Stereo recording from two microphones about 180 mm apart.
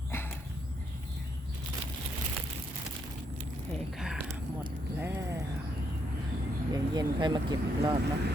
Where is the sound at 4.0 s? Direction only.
Centre (ahead or behind).